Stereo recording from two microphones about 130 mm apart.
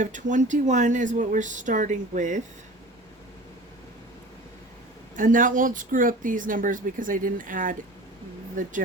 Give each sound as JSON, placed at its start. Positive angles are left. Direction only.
{"t": 0.0, "sound": "speech", "side_deg": -75}
{"t": 5.1, "sound": "speech", "side_deg": -90}